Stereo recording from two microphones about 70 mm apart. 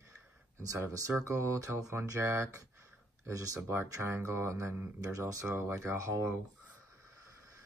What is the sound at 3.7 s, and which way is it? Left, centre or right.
Speech, right.